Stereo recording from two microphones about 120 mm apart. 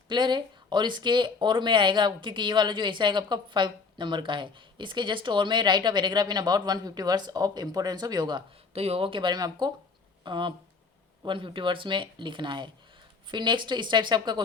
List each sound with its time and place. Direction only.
0.1 s speech: 40° right (ahead or behind)
8.7 s speech: 55° right (ahead or behind); by 14.4 s 40° right (ahead or behind)